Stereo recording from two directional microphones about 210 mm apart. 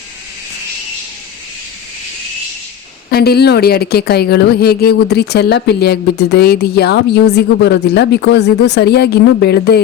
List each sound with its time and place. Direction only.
3.1 s a woman's voice: 50° left (ahead or behind)